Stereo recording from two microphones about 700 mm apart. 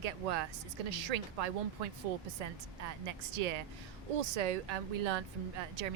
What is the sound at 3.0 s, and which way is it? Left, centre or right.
A woman's voice, right.